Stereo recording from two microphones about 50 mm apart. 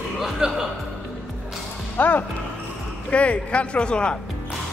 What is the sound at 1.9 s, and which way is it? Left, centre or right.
Speech, left.